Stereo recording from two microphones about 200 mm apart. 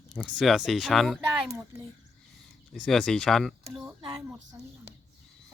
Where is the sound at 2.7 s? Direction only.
Centre (ahead or behind).